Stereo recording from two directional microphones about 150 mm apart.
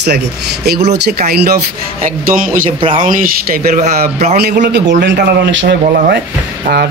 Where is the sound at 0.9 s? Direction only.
90° right; by 2.7 s 70° right (ahead or behind).